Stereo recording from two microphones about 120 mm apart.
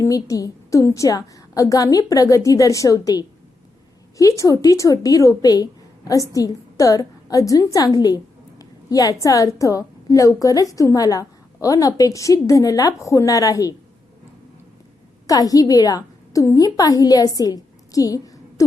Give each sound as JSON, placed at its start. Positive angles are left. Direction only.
{"t": 0.0, "sound": "a woman's voice", "side_deg": 30}
{"t": 15.3, "sound": "a woman's voice", "side_deg": 30}